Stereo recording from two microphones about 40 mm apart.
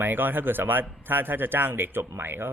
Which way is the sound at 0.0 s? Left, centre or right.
Right.